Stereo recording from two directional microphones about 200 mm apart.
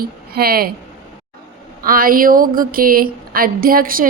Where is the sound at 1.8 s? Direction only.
45° right (ahead or behind).